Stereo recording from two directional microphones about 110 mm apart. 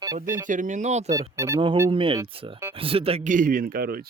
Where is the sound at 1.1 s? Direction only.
30° right (ahead or behind).